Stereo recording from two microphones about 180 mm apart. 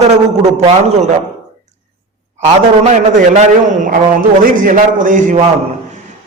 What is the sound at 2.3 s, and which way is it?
A man's voice, 40° right (ahead or behind).